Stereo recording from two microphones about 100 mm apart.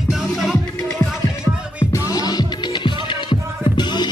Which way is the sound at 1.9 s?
40° left (ahead or behind).